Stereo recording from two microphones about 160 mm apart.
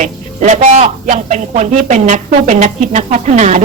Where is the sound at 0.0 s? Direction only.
50° right (ahead or behind).